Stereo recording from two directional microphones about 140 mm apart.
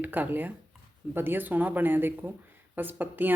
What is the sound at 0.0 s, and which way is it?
Speech, 10° right (ahead or behind).